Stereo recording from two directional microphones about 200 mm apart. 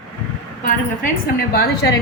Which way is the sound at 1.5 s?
50° left (ahead or behind).